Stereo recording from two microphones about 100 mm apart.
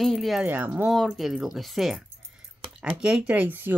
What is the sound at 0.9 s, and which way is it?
Speech, centre (ahead or behind).